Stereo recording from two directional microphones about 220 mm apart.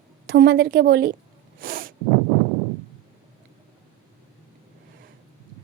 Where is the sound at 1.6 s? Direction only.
40° right (ahead or behind).